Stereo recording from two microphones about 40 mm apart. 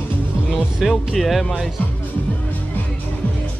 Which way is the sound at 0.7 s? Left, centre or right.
Centre.